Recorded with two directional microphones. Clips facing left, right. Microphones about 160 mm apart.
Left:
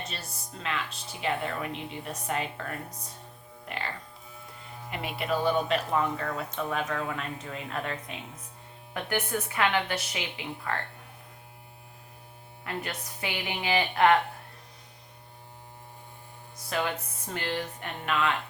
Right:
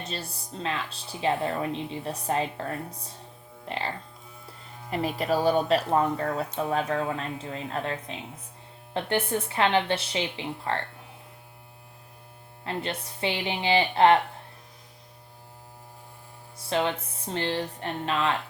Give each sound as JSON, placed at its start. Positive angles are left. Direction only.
{"t": 0.1, "sound": "speech", "side_deg": -30}
{"t": 12.6, "sound": "speech", "side_deg": -30}
{"t": 16.6, "sound": "speech", "side_deg": -25}